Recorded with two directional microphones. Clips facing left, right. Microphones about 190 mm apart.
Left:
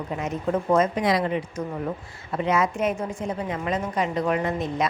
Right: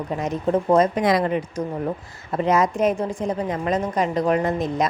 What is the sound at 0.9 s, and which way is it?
A woman's voice, 50° right (ahead or behind).